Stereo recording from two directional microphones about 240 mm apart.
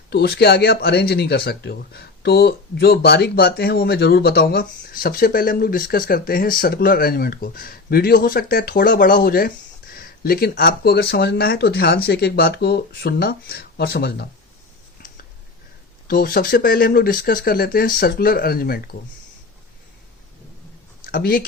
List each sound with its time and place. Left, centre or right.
0.1 s speech: left
16.0 s speech: left
21.1 s speech: left